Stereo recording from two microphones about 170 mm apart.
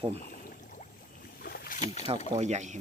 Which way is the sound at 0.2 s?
55° left (ahead or behind).